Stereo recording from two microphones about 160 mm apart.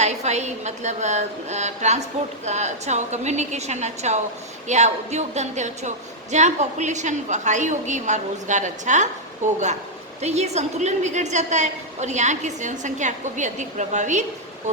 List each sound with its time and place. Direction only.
0.0 s a woman's voice: 45° right (ahead or behind)